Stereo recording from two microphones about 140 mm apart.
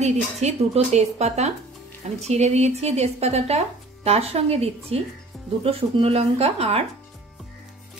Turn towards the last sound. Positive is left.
turn(degrees=-45)  # may be behind; listen again after turning